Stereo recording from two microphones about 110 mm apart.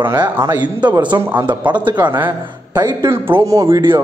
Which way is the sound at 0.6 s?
40° right (ahead or behind).